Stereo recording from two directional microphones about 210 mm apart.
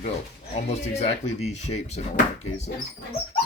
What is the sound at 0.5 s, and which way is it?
Speech, 30° left (ahead or behind).